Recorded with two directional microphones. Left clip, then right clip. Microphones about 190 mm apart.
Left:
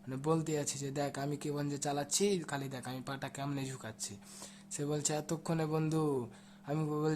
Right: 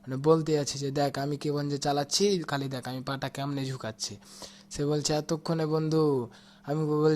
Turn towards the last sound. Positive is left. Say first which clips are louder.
# right 9 dB
turn(degrees=-20)  # may be behind; listen again after turning